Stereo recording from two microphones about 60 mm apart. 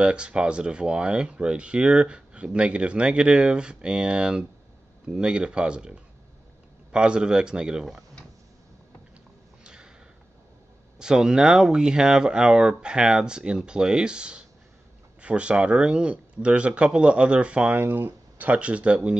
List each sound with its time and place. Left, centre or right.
0.0 s speech: centre
9.6 s a sound: centre
11.0 s speech: centre
17.7 s speech: right